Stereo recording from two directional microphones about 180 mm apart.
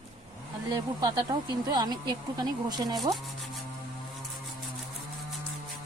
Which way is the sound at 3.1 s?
Centre (ahead or behind).